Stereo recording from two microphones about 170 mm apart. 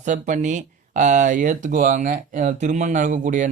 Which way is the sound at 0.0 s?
45° right (ahead or behind).